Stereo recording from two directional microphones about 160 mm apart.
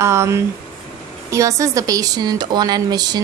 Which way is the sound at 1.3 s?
20° right (ahead or behind).